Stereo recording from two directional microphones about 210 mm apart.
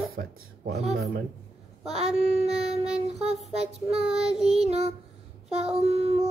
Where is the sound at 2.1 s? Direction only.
30° right (ahead or behind).